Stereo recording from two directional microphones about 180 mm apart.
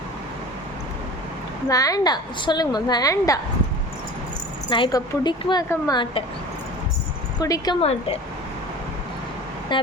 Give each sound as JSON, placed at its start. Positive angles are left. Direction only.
{"t": 1.7, "sound": "a woman's voice", "side_deg": 20}
{"t": 4.7, "sound": "a woman's voice", "side_deg": 25}
{"t": 7.3, "sound": "a woman's voice", "side_deg": 20}
{"t": 7.8, "sound": "speech", "side_deg": 35}
{"t": 9.7, "sound": "a woman's voice", "side_deg": 25}